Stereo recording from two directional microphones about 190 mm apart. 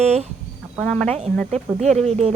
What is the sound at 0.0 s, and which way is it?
Speech, 35° right (ahead or behind).